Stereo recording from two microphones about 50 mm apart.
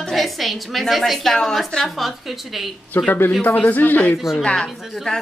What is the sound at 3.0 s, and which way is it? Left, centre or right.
A man's voice, left.